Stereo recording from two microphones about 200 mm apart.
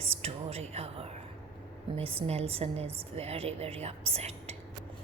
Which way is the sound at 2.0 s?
30° right (ahead or behind).